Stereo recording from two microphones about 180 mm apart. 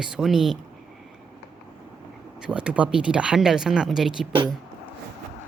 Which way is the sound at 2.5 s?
5° right (ahead or behind).